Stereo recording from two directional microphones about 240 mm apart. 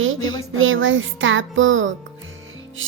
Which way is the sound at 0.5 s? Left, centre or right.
Right.